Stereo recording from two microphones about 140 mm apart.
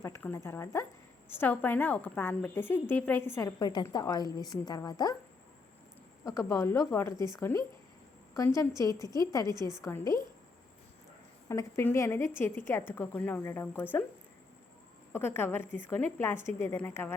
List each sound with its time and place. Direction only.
0.2 s a woman's voice: 15° left (ahead or behind)
6.2 s a woman's voice: 20° left (ahead or behind)
11.4 s a woman's voice: 20° left (ahead or behind)
15.1 s a woman's voice: 15° left (ahead or behind)